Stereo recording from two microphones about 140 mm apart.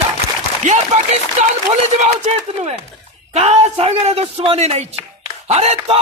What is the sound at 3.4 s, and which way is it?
A man's voice, 50° right (ahead or behind).